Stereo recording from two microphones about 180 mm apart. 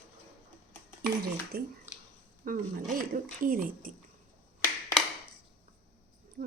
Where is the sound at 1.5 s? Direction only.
60° right (ahead or behind).